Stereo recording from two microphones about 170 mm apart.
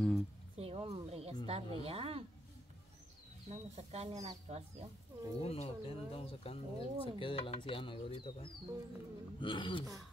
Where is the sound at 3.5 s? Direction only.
40° right (ahead or behind).